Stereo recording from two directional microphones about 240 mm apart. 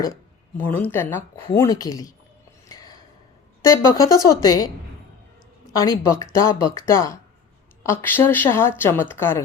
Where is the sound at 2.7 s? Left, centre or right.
Centre.